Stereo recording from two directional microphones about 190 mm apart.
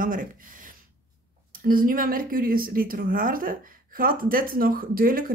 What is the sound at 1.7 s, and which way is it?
Speech, 50° right (ahead or behind).